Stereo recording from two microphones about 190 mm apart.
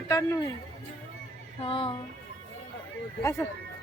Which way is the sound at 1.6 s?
25° left (ahead or behind).